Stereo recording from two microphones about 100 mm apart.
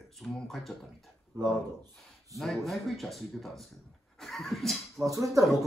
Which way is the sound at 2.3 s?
Centre (ahead or behind).